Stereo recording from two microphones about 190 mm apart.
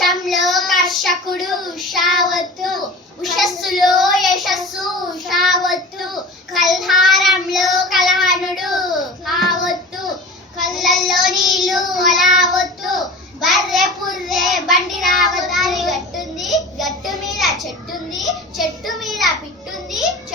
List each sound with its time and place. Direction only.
0.0 s child singing: centre (ahead or behind)